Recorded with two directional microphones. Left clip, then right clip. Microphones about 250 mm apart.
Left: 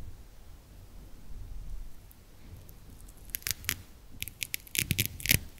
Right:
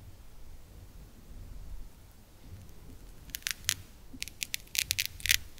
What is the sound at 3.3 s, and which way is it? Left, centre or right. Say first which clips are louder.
Scissors: right 2 dB; centre.